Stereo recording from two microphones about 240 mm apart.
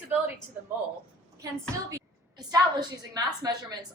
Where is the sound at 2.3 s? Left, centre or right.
Centre.